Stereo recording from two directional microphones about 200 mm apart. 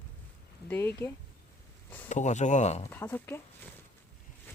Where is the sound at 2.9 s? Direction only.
10° left (ahead or behind).